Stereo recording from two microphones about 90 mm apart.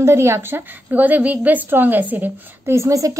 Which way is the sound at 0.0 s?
30° right (ahead or behind).